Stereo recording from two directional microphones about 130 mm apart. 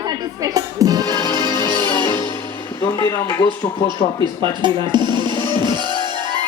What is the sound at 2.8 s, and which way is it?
Speech, 20° left (ahead or behind).